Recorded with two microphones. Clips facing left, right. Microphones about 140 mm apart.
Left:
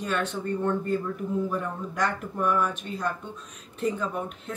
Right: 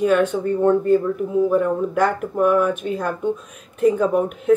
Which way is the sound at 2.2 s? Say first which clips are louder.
Right 9 dB; 55° right (ahead or behind).